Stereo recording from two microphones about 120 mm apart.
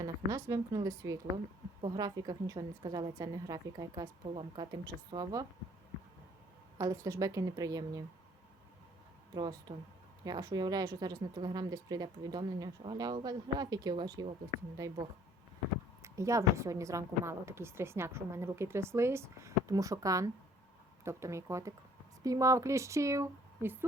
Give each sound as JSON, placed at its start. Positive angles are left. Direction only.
{"t": 0.0, "sound": "a woman's voice", "side_deg": -25}
{"t": 6.7, "sound": "a woman's voice", "side_deg": -30}
{"t": 9.3, "sound": "a woman's voice", "side_deg": -35}
{"t": 16.0, "sound": "a woman's voice", "side_deg": -25}